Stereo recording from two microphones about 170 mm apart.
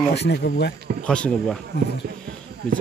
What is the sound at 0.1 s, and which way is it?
Speech, 80° left.